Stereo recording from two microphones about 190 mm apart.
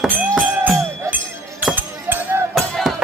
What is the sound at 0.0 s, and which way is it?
Music, 5° right (ahead or behind).